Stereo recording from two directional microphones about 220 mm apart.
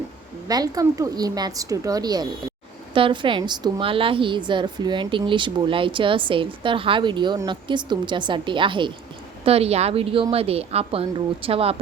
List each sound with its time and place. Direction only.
0.4 s a woman's voice: 15° right (ahead or behind)